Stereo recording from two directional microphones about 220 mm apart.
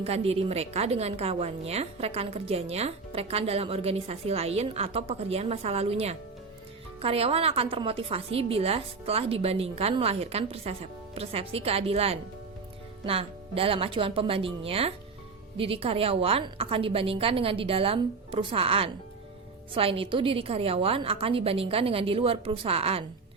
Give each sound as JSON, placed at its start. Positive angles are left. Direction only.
{"t": 0.0, "sound": "a woman's voice", "side_deg": -25}